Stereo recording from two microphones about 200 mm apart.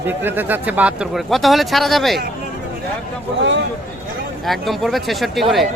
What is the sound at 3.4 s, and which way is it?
Speech, 60° right (ahead or behind).